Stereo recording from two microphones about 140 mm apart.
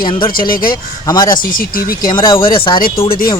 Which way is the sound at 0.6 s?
30° left (ahead or behind).